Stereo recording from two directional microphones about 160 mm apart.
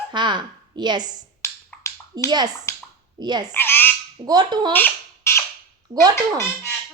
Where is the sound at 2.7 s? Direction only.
20° left (ahead or behind).